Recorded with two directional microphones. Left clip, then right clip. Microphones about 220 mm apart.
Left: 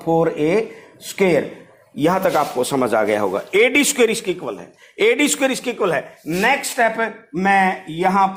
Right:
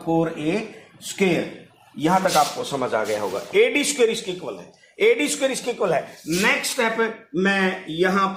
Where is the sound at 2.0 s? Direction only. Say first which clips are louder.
Left 2 dB; 50° left (ahead or behind).